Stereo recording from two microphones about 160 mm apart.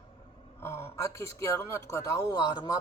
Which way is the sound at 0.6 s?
15° left (ahead or behind).